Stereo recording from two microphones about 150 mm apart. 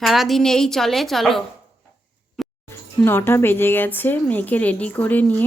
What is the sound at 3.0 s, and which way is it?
A woman's voice, 15° left (ahead or behind).